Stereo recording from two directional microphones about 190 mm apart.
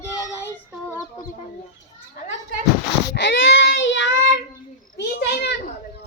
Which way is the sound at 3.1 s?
65° left (ahead or behind).